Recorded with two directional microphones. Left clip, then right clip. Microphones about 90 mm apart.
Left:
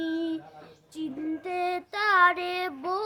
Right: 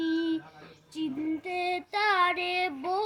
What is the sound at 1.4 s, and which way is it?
Child singing, 45° left (ahead or behind).